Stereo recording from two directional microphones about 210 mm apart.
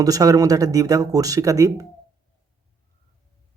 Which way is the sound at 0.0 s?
15° right (ahead or behind).